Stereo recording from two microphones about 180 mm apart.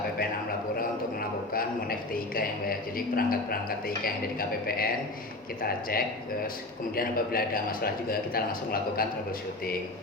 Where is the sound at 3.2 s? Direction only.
55° left (ahead or behind).